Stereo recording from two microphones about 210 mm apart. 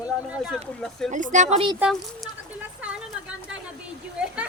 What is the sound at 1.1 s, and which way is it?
Speech, 35° right (ahead or behind).